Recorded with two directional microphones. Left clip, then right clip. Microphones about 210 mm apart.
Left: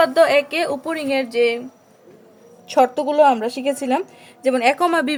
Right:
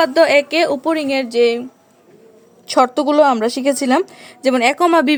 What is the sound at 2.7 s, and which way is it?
A woman's voice, 45° right (ahead or behind).